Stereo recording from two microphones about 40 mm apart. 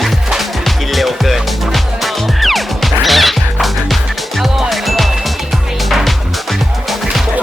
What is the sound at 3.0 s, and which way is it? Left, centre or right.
Music, centre.